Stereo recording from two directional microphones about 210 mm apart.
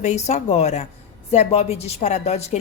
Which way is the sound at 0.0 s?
35° left (ahead or behind).